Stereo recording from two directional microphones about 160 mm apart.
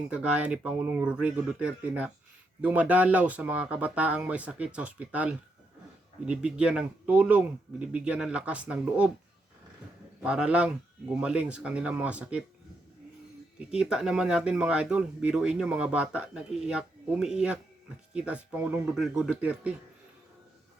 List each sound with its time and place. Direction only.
0.1 s speech: 5° right (ahead or behind)
10.2 s speech: 5° right (ahead or behind)
13.7 s speech: 5° right (ahead or behind)